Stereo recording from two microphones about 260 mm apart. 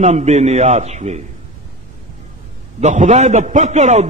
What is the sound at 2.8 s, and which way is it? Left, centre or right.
A man's voice, right.